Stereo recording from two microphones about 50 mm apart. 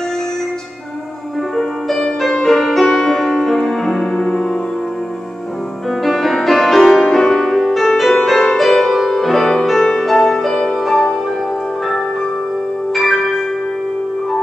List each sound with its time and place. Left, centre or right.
1.6 s music: centre
6.0 s music: centre
12.9 s music: centre